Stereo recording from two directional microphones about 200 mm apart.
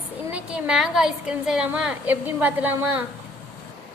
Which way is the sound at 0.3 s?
5° right (ahead or behind).